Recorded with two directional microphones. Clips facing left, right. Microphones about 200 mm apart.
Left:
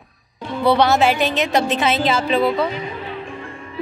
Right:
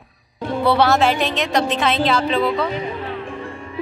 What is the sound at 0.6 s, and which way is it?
A woman's voice, centre (ahead or behind).